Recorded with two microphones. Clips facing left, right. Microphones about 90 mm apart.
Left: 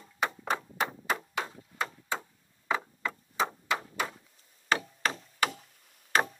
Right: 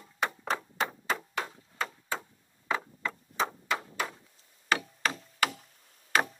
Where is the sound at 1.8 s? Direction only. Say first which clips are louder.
Left 1 dB; 5° left (ahead or behind).